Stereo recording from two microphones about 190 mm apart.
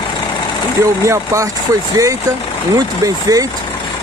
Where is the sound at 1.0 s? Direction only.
15° right (ahead or behind).